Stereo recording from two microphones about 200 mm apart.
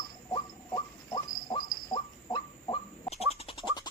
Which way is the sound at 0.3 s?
20° left (ahead or behind).